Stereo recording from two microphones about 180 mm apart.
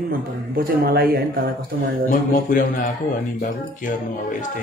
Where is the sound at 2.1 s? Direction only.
45° left (ahead or behind).